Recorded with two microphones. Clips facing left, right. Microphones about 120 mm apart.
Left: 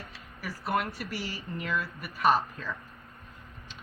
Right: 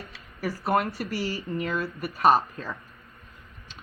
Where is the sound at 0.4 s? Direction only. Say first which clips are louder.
Right 5 dB; 40° right (ahead or behind).